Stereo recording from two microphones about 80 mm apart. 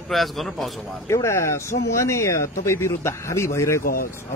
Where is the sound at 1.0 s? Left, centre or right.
Left.